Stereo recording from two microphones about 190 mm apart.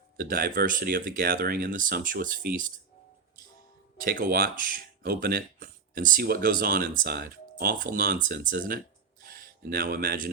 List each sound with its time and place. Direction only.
0.2 s speech: 50° right (ahead or behind)
4.0 s speech: 50° right (ahead or behind)